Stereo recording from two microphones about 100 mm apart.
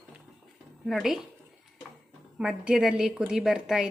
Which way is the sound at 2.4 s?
5° right (ahead or behind).